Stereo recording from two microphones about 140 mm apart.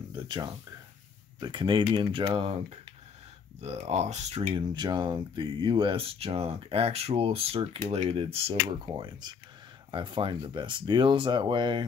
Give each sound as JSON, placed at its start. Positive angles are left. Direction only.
{"t": 0.1, "sound": "a sound", "side_deg": -35}
{"t": 1.4, "sound": "speech", "side_deg": -35}
{"t": 3.6, "sound": "speech", "side_deg": -55}
{"t": 4.7, "sound": "speech", "side_deg": -30}